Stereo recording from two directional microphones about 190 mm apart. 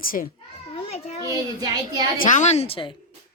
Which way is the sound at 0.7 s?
30° left (ahead or behind).